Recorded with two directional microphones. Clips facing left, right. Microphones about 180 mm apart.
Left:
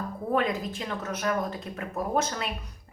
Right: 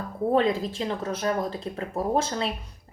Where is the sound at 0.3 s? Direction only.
30° right (ahead or behind).